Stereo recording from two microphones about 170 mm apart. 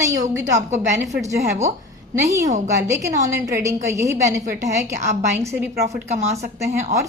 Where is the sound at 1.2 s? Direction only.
20° right (ahead or behind).